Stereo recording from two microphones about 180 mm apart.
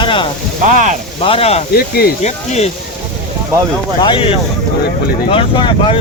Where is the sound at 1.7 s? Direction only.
60° left (ahead or behind).